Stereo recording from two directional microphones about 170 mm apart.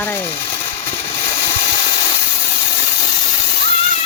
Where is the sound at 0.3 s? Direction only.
30° left (ahead or behind).